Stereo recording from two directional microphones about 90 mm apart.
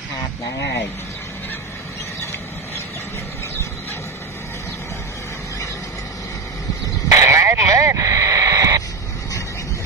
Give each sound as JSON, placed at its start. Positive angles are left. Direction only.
{"t": 7.1, "sound": "radio", "side_deg": -30}